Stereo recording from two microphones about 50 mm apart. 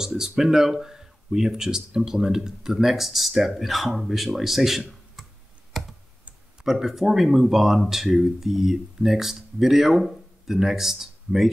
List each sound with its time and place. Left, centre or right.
0.0 s speech: centre
5.7 s computer keyboard: centre
6.6 s speech: centre